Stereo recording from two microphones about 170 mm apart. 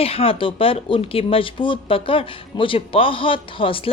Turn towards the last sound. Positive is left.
turn(degrees=30)  # may be behind; listen again after turning